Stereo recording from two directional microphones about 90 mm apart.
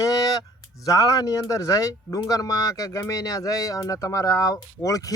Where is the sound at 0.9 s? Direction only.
40° left (ahead or behind).